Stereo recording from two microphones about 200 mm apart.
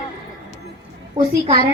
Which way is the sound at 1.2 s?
30° right (ahead or behind).